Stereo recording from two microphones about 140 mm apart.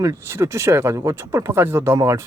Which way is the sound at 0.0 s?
20° right (ahead or behind).